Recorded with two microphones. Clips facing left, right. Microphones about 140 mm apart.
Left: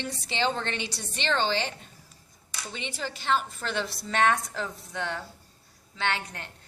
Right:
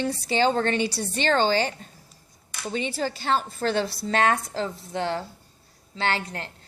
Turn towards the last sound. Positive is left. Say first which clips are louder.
# right 4 dB
turn(degrees=-35)  # may be behind; listen again after turning